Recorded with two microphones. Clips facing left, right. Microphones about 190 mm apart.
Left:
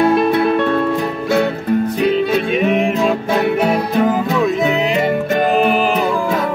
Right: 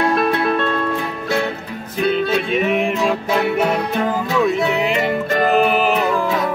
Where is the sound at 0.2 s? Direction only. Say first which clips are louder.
Left 4 dB; 15° left (ahead or behind).